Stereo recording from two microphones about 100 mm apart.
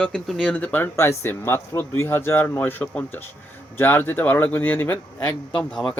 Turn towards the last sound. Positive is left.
turn(degrees=10)  # may be behind; listen again after turning